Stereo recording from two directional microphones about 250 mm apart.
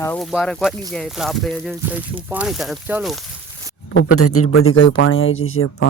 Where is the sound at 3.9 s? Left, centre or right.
Left.